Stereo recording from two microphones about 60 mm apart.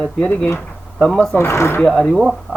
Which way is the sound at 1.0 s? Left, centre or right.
Centre.